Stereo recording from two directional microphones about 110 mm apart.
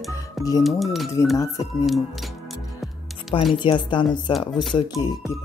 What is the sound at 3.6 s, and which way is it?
Speech, 45° left (ahead or behind).